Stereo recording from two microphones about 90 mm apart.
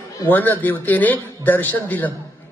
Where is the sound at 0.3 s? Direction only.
20° left (ahead or behind).